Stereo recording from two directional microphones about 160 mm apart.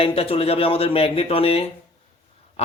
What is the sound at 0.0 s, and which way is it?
Speech, 35° left (ahead or behind).